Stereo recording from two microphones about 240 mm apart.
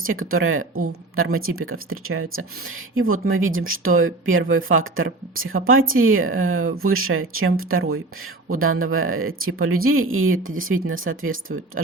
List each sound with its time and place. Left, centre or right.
0.0 s speech: right